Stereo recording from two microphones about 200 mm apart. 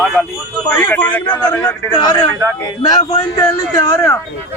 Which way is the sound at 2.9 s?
25° left (ahead or behind).